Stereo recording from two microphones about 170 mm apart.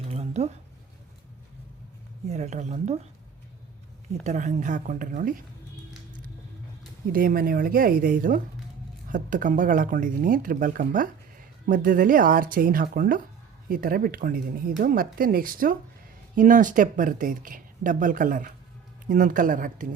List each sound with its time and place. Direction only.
0.1 s a sound: 40° right (ahead or behind)
2.2 s speech: 45° right (ahead or behind)
4.2 s speech: 45° right (ahead or behind)
7.1 s speech: 55° right (ahead or behind)